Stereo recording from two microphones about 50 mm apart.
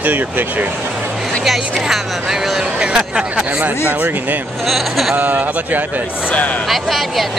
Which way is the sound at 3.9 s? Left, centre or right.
Right.